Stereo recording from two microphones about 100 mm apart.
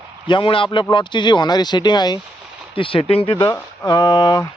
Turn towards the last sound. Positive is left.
turn(degrees=45)  # may be behind; listen again after turning